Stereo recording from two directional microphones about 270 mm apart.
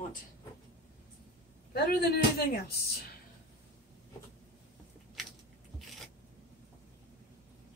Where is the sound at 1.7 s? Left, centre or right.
Left.